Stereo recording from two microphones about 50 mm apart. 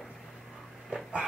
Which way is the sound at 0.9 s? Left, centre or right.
Right.